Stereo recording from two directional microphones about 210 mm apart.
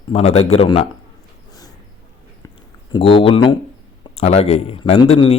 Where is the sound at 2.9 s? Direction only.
25° left (ahead or behind).